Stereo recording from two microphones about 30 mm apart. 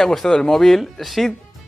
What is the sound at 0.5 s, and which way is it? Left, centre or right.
Speech, centre.